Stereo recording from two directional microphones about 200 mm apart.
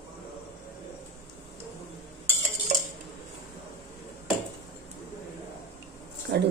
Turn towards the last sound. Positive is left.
turn(degrees=-40)  # may be behind; listen again after turning